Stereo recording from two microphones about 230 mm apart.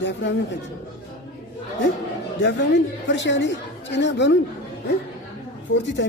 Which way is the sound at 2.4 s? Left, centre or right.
Left.